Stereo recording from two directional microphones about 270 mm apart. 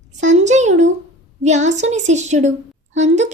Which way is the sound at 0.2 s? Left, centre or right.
Right.